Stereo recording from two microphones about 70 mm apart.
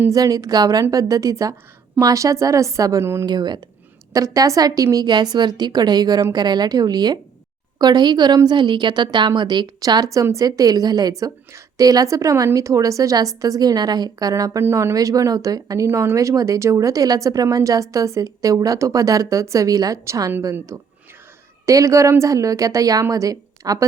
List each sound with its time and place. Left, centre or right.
0.1 s a woman's voice: right
3.0 s speech: right
3.2 s a woman's voice: right
4.1 s a woman's voice: right
11.2 s a woman's voice: right
14.6 s speech: right
14.9 s a woman's voice: right
20.4 s a woman's voice: right